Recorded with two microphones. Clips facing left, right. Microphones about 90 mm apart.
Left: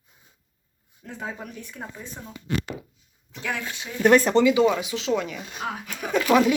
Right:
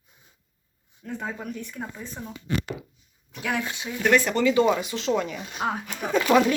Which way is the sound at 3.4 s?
15° right (ahead or behind).